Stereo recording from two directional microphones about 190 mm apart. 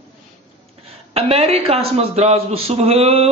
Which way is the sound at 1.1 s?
30° right (ahead or behind).